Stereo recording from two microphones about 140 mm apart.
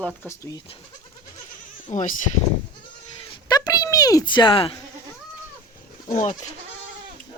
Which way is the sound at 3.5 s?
25° left (ahead or behind).